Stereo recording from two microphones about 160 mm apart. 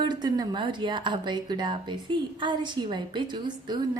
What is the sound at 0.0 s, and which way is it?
A woman's voice, 25° right (ahead or behind).